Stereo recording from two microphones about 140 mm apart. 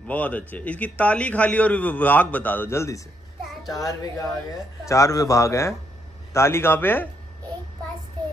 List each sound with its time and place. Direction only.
0.0 s a man's voice: 10° left (ahead or behind)